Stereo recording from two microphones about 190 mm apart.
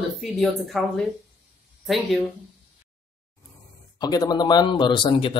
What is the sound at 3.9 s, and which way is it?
Speech, 20° left (ahead or behind).